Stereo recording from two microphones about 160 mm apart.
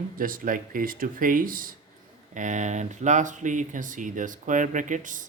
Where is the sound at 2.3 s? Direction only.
50° right (ahead or behind).